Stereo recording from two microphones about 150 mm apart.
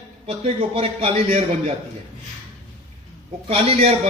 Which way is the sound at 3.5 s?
40° right (ahead or behind).